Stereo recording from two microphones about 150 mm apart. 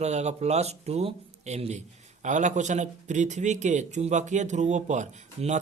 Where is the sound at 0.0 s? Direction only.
50° right (ahead or behind).